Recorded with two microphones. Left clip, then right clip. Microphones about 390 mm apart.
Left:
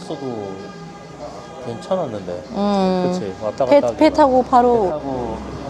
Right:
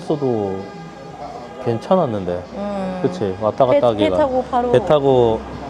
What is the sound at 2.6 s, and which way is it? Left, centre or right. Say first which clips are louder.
Speech: left 6 dB; left.